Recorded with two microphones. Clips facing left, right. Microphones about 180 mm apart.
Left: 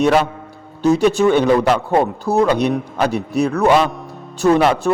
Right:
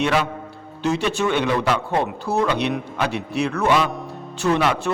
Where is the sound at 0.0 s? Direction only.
40° left (ahead or behind).